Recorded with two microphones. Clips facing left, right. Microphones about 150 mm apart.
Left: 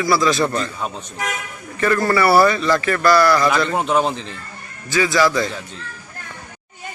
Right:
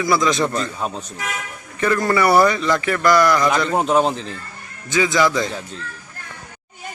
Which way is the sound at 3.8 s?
5° right (ahead or behind).